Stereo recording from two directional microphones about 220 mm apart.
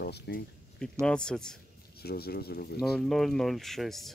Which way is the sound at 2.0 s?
45° left (ahead or behind).